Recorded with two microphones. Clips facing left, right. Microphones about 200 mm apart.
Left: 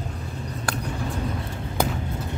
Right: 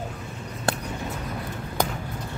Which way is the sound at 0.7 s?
25° right (ahead or behind).